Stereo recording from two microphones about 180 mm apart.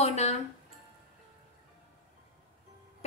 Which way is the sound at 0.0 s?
40° left (ahead or behind).